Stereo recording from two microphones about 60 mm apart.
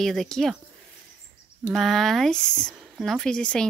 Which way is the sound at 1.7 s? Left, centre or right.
Centre.